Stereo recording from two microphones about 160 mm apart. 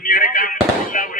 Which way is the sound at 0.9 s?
55° left (ahead or behind).